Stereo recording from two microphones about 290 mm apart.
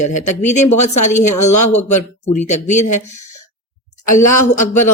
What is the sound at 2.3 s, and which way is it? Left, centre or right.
Speech, left.